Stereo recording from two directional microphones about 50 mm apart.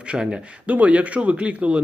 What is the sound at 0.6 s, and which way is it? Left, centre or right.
Speech, right.